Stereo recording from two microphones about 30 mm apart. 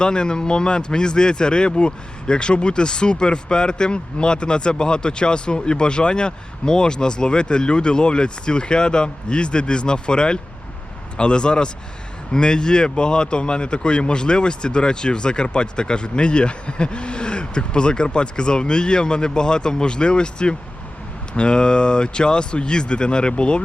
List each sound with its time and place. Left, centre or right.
0.0 s speech: left